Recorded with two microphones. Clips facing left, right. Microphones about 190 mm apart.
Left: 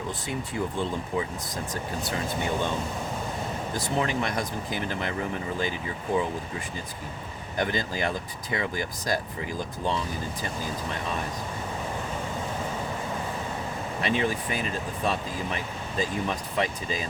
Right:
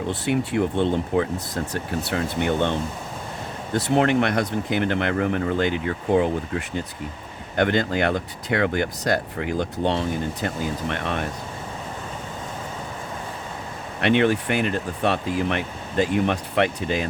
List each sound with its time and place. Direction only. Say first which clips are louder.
0.1 s speech: right 13 dB; 70° right (ahead or behind)
14.0 s speech: right 8 dB; 70° right (ahead or behind)